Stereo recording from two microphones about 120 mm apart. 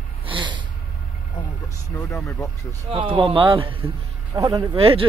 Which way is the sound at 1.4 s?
30° left (ahead or behind).